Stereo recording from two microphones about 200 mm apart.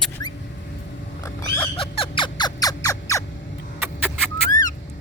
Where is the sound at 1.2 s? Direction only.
15° left (ahead or behind).